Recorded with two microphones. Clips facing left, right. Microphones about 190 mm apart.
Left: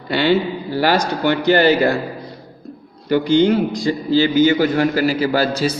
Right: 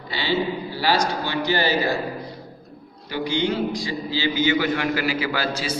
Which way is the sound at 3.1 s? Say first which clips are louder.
Left 10 dB; 50° left (ahead or behind).